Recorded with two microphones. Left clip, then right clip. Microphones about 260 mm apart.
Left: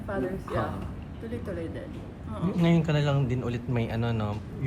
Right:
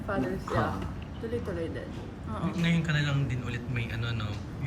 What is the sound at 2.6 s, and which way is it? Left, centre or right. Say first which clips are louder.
Speech: left 5 dB; centre.